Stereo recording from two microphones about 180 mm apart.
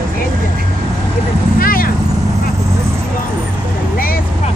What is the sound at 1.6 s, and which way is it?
Vehicle, 50° left (ahead or behind).